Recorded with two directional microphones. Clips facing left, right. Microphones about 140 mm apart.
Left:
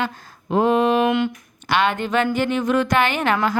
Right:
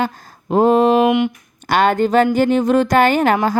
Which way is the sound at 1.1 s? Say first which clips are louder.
Right 4 dB; 15° right (ahead or behind).